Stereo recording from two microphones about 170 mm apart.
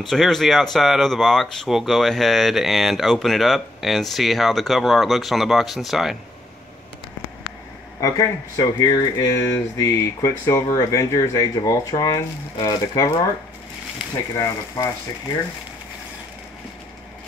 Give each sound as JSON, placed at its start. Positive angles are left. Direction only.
{"t": 0.1, "sound": "speech", "side_deg": 0}
{"t": 8.0, "sound": "speech", "side_deg": 20}
{"t": 14.3, "sound": "speech", "side_deg": 20}